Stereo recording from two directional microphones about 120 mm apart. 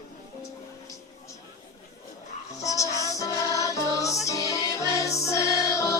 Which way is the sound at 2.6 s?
30° left (ahead or behind).